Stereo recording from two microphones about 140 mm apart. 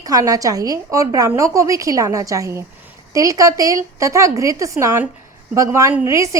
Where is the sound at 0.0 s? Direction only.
25° right (ahead or behind).